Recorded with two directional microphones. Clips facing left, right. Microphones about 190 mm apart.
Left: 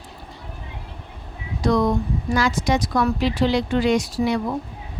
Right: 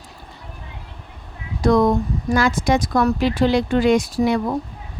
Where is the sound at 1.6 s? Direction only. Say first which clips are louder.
Right 4 dB; 50° right (ahead or behind).